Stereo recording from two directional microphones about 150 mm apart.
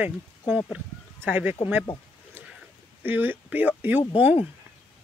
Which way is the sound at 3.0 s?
15° right (ahead or behind).